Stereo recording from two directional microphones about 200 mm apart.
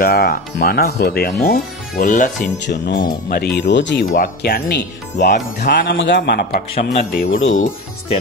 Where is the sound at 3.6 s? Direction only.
60° left (ahead or behind).